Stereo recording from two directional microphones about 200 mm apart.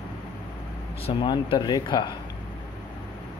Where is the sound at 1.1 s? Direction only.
25° left (ahead or behind).